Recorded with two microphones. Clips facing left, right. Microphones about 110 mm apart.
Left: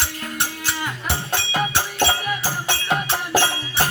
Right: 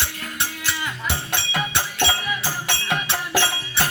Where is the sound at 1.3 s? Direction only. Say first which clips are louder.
Left 5 dB; 35° left (ahead or behind).